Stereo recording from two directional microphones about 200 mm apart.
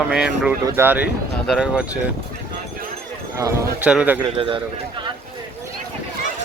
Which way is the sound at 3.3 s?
10° right (ahead or behind).